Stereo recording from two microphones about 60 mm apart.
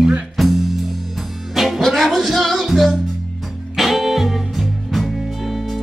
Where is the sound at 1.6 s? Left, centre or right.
Centre.